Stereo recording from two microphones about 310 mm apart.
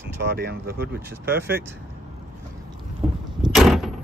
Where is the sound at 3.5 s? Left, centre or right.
Centre.